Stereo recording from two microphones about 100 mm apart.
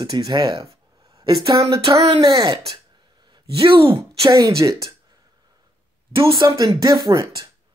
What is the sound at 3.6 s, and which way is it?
Speech, 65° right (ahead or behind).